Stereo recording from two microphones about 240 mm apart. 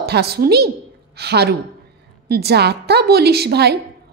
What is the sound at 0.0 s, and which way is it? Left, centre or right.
A woman's voice, right.